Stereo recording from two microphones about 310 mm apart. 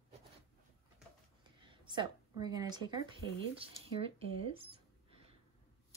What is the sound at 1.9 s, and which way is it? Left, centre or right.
Speech, centre.